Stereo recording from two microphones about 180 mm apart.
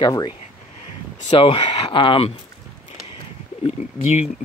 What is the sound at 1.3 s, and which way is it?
Speech, 25° left (ahead or behind).